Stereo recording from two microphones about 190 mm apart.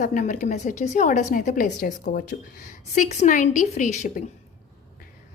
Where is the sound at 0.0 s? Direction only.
40° left (ahead or behind).